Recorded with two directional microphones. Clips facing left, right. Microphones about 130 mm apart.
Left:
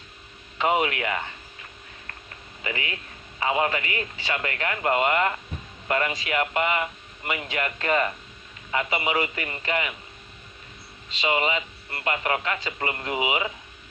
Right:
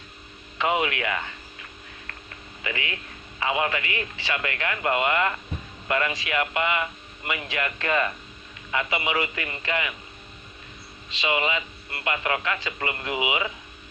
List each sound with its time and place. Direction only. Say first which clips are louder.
0.6 s speech: left 1 dB; 30° left (ahead or behind)
2.6 s speech: even; 30° left (ahead or behind)
11.2 s speech: left 1 dB; 30° left (ahead or behind)